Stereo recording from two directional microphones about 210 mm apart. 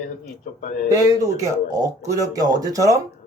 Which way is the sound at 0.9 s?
15° right (ahead or behind).